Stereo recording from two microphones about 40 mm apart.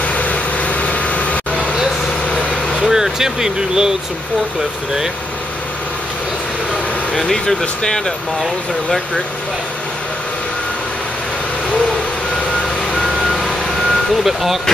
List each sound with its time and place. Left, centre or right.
0.0 s vehicle: left
2.8 s speech: centre
7.2 s speech: centre
13.0 s vehicle: centre
14.2 s speech: centre